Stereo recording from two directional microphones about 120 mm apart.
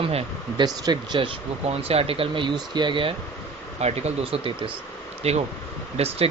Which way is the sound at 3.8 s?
65° right (ahead or behind).